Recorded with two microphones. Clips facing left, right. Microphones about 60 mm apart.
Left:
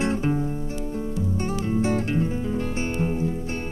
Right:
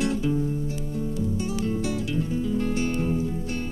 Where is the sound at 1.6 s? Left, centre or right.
Left.